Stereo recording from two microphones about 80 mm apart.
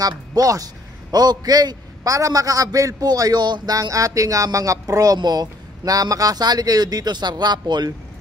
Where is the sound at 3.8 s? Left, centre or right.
Right.